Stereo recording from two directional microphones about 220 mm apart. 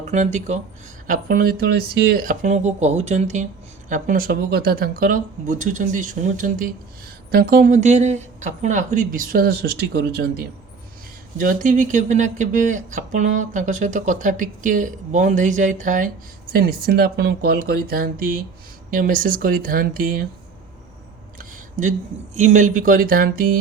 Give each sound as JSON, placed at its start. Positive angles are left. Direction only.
{"t": 0.0, "sound": "speech", "side_deg": -35}
{"t": 11.3, "sound": "speech", "side_deg": -40}
{"t": 21.3, "sound": "a sound", "side_deg": -35}
{"t": 22.4, "sound": "speech", "side_deg": -35}